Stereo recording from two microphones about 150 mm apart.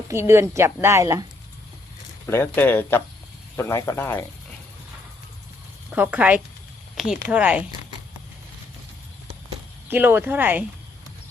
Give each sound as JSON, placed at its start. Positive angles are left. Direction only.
{"t": 0.1, "sound": "a woman's voice", "side_deg": -15}
{"t": 2.2, "sound": "speech", "side_deg": 15}
{"t": 5.9, "sound": "speech", "side_deg": -10}
{"t": 9.9, "sound": "speech", "side_deg": -15}